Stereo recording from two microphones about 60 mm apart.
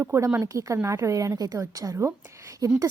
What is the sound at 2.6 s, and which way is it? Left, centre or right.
Speech, right.